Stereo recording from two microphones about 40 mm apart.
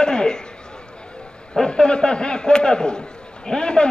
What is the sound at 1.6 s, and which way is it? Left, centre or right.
A man's voice, left.